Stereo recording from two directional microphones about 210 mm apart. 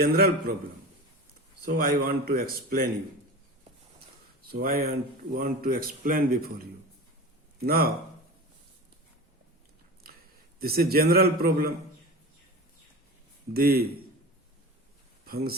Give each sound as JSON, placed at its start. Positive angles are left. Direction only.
{"t": 0.0, "sound": "speech", "side_deg": -45}
{"t": 1.6, "sound": "speech", "side_deg": -45}
{"t": 4.4, "sound": "speech", "side_deg": -45}
{"t": 7.6, "sound": "speech", "side_deg": -50}
{"t": 10.6, "sound": "speech", "side_deg": -45}
{"t": 13.5, "sound": "speech", "side_deg": -45}